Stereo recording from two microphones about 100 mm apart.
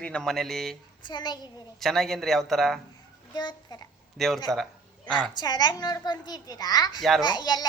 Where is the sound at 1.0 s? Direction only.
45° left (ahead or behind).